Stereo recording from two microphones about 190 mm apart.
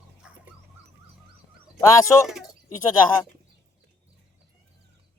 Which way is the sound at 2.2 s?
Centre (ahead or behind).